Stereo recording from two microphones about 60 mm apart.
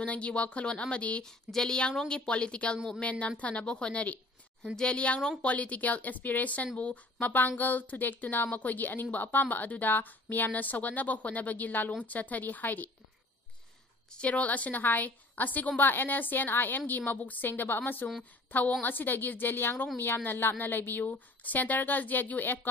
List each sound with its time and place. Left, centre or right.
0.0 s a woman's voice: centre
14.1 s a woman's voice: left